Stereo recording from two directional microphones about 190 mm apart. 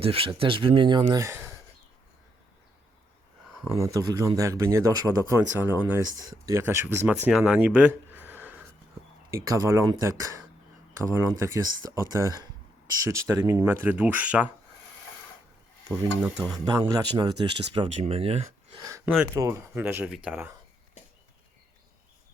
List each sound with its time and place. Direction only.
0.0 s speech: 30° right (ahead or behind); by 1.5 s 15° right (ahead or behind)
3.6 s speech: 15° right (ahead or behind)
9.3 s speech: 20° right (ahead or behind)
16.2 s speech: 5° right (ahead or behind)
16.6 s speech: 20° right (ahead or behind)
18.9 s speech: 15° right (ahead or behind)